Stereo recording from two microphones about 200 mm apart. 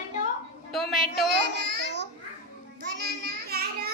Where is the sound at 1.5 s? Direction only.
60° right (ahead or behind).